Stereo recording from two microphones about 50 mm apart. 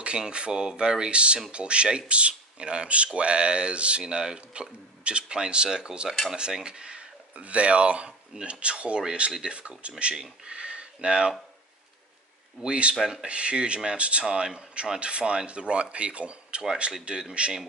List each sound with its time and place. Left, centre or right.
0.0 s speech: right
12.6 s speech: right
13.0 s speech: centre
14.2 s speech: centre